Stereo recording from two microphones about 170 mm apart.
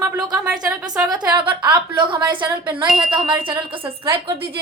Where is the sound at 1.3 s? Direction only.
25° right (ahead or behind).